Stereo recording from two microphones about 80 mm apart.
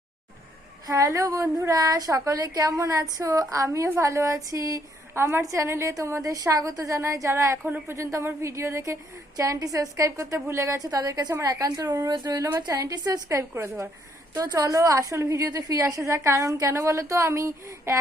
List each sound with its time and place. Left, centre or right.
0.9 s a woman's voice: right
5.1 s a woman's voice: right
12.5 s a woman's voice: right
14.4 s a woman's voice: right